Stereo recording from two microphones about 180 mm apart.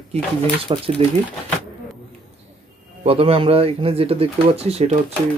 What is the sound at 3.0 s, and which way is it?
Speech, 30° right (ahead or behind).